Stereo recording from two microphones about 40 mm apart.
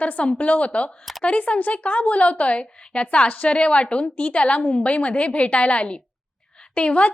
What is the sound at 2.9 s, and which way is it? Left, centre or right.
A woman's voice, left.